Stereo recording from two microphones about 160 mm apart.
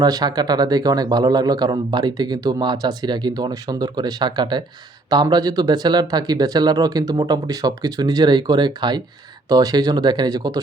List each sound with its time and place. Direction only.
0.0 s speech: 25° right (ahead or behind)